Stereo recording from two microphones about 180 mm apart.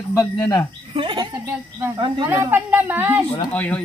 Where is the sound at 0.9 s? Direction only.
30° right (ahead or behind).